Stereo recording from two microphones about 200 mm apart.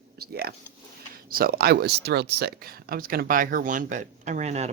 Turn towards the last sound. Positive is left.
turn(degrees=-35)  # may be behind; listen again after turning